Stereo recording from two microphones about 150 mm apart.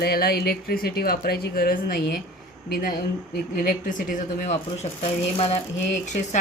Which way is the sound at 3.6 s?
60° left (ahead or behind).